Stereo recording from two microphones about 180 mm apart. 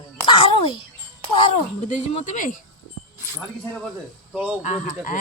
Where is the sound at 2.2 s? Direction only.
45° left (ahead or behind).